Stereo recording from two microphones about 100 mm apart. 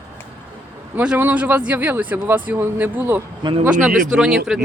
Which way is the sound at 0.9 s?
10° right (ahead or behind).